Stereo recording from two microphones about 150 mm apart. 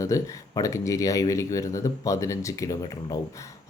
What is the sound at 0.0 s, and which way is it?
Speech, 20° left (ahead or behind).